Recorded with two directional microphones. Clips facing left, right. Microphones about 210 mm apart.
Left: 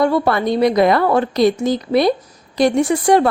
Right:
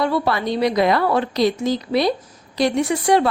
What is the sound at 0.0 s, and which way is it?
A woman's voice, 50° left (ahead or behind).